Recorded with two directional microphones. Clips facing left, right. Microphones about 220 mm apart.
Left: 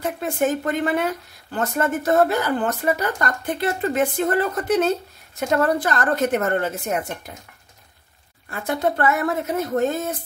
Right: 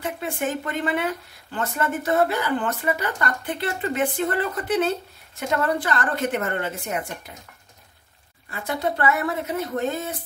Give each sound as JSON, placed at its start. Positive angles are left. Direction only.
{"t": 0.0, "sound": "speech", "side_deg": 45}
{"t": 8.5, "sound": "speech", "side_deg": 50}